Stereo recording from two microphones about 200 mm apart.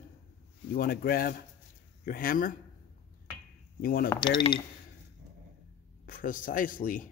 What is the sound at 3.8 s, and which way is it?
Speech, 45° left (ahead or behind).